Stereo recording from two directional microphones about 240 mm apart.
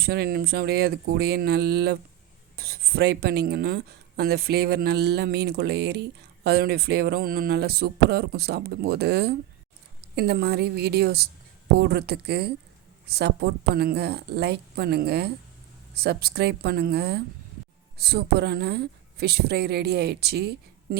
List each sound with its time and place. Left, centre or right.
0.0 s speech: right